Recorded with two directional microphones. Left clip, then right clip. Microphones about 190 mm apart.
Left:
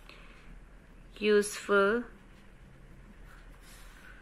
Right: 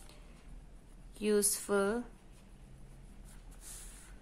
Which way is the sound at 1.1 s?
10° right (ahead or behind).